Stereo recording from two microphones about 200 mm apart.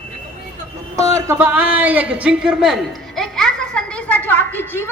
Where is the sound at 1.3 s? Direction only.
10° right (ahead or behind).